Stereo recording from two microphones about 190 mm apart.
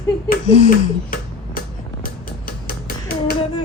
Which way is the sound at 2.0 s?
50° left (ahead or behind).